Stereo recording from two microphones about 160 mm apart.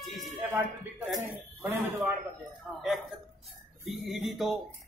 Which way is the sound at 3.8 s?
Centre (ahead or behind).